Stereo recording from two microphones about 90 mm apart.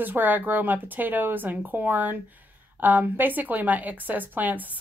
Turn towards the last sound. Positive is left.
turn(degrees=-20)  # may be behind; listen again after turning